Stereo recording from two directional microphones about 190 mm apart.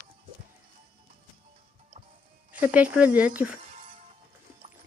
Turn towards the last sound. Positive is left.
turn(degrees=-5)  # may be behind; listen again after turning